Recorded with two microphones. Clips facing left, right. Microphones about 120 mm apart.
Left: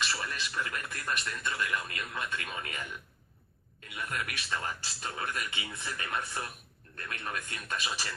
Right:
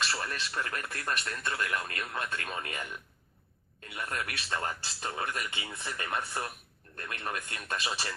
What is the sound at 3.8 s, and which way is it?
Speech, 35° right (ahead or behind).